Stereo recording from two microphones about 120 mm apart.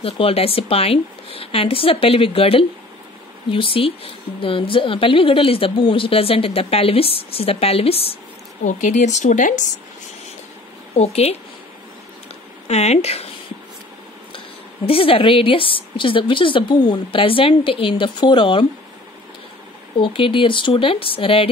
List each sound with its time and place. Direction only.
0.0 s a woman's voice: 55° left (ahead or behind)
8.6 s speech: 90° left
11.0 s a woman's voice: 60° left (ahead or behind)
12.6 s speech: 60° left (ahead or behind)
14.9 s a woman's voice: 50° left (ahead or behind)
20.0 s a woman's voice: 45° left (ahead or behind)